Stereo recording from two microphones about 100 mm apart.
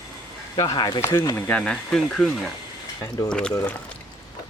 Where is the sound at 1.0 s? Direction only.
30° left (ahead or behind).